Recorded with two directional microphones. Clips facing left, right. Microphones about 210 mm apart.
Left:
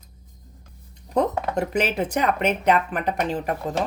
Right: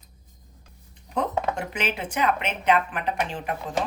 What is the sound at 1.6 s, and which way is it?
Speech, 40° left (ahead or behind).